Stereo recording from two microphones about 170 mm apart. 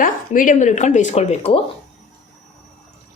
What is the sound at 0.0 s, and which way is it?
Speech, 50° left (ahead or behind).